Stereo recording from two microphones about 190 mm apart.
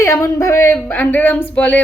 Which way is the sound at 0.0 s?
15° left (ahead or behind).